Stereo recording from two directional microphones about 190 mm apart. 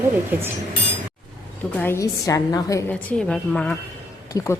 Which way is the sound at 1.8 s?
15° left (ahead or behind).